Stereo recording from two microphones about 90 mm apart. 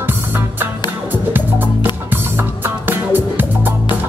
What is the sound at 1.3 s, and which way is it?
Music, 20° right (ahead or behind).